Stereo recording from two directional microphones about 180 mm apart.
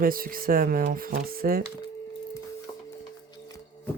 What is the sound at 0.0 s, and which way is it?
Speech, 55° right (ahead or behind).